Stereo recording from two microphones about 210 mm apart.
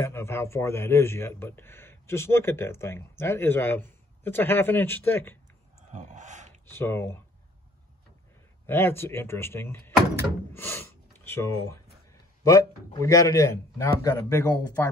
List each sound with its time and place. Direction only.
0.0 s speech: 10° left (ahead or behind)
5.9 s a sound: 35° right (ahead or behind)
6.6 s speech: 10° left (ahead or behind)
8.6 s speech: 10° left (ahead or behind)